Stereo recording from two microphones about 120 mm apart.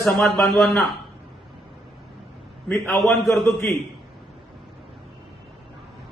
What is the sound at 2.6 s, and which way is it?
Speech, 20° left (ahead or behind).